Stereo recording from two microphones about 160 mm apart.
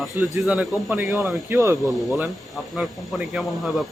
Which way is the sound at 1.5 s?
20° right (ahead or behind).